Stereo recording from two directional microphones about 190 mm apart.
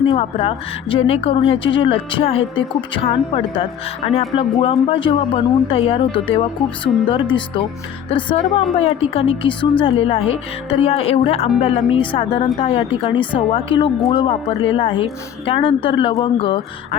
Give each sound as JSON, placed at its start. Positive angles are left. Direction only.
{"t": 0.1, "sound": "a woman's voice", "side_deg": 25}